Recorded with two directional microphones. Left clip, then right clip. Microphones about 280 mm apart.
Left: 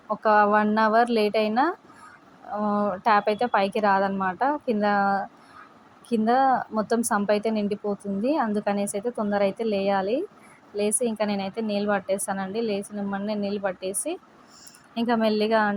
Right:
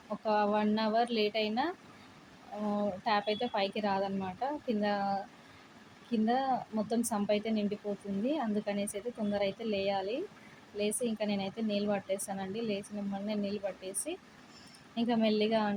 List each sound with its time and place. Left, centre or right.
0.2 s a woman's voice: left